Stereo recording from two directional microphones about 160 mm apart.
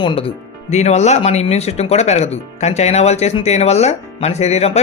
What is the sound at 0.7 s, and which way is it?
Speech, 45° left (ahead or behind).